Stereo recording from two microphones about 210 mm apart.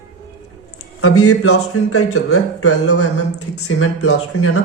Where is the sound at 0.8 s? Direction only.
90° left.